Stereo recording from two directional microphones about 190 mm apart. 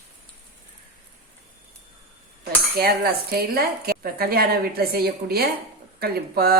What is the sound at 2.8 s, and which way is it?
Speech, 55° right (ahead or behind).